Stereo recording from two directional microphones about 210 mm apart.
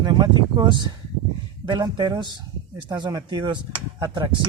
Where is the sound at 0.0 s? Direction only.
20° right (ahead or behind).